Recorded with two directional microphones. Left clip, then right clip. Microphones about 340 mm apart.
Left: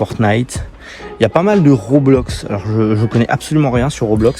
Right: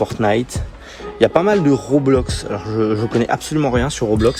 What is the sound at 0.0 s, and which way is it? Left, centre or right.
Speech, left.